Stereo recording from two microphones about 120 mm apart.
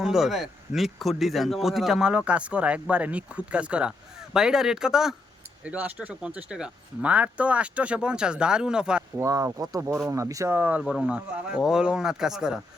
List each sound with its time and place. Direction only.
0.0 s a man's voice: 5° right (ahead or behind)
9.1 s a man's voice: 25° right (ahead or behind); by 12.5 s 5° right (ahead or behind)